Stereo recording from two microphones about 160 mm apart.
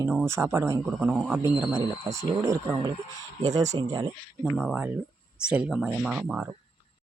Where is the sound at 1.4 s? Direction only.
25° right (ahead or behind).